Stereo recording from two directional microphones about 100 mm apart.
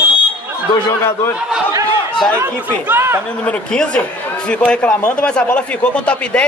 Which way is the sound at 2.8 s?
25° right (ahead or behind).